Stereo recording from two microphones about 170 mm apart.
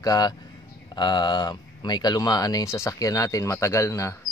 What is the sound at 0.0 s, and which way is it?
Speech, 20° left (ahead or behind).